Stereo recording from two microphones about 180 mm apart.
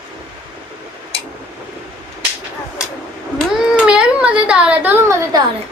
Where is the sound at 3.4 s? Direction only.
5° right (ahead or behind).